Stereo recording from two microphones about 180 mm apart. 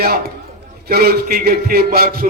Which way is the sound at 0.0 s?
60° right (ahead or behind).